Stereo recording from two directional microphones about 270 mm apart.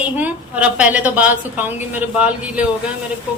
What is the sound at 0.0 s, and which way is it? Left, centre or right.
A woman's voice, centre.